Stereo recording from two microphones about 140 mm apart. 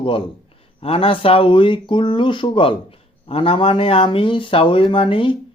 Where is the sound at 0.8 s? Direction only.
40° left (ahead or behind).